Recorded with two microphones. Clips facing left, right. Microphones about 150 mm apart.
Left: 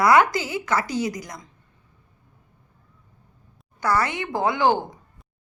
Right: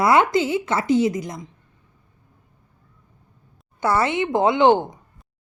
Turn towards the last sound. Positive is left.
turn(degrees=-20)  # may be behind; listen again after turning